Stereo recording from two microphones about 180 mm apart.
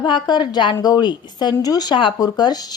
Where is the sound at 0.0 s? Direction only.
25° left (ahead or behind).